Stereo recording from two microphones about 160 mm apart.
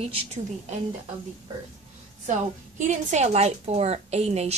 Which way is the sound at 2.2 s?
50° right (ahead or behind).